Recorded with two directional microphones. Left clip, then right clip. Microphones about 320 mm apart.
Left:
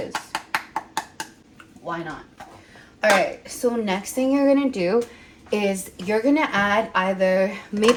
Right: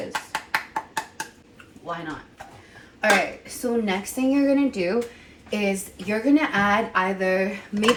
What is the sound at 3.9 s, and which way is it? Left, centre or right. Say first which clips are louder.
Speech: left 2 dB; left.